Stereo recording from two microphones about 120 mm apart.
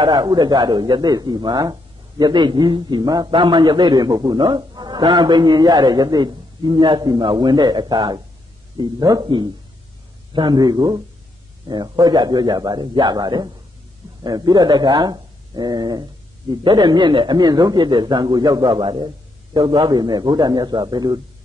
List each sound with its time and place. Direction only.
0.0 s speech: 35° right (ahead or behind)